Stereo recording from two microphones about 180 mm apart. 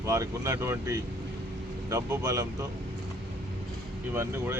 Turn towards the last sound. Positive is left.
turn(degrees=-10)  # may be behind; listen again after turning